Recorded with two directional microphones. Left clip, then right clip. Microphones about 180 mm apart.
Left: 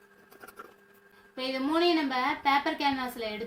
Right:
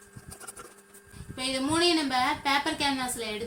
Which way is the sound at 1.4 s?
10° left (ahead or behind).